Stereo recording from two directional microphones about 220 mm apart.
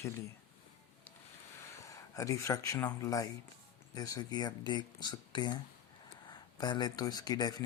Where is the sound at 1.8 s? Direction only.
15° left (ahead or behind).